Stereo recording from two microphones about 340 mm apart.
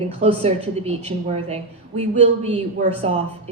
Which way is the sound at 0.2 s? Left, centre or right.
Centre.